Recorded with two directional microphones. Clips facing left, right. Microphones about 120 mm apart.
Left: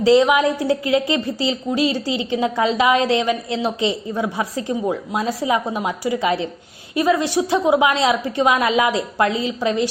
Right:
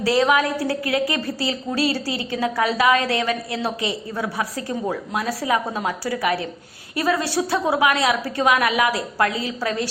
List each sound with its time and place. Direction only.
0.0 s a woman's voice: 20° left (ahead or behind)